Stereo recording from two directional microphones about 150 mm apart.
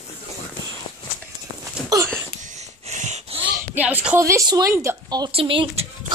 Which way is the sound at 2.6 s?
50° right (ahead or behind).